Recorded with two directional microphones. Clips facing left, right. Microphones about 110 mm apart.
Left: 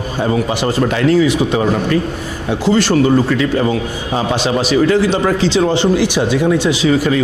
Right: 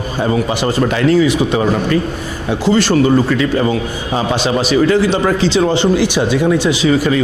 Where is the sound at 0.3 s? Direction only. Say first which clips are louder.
Even; 25° right (ahead or behind).